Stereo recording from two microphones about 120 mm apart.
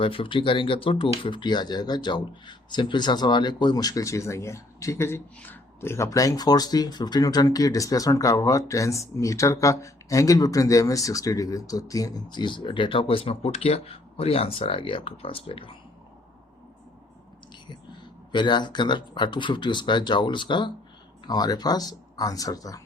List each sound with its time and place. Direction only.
0.0 s speech: 45° left (ahead or behind)
18.3 s speech: 40° left (ahead or behind)